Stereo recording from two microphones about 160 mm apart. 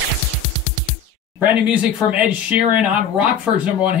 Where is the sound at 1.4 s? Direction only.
10° right (ahead or behind).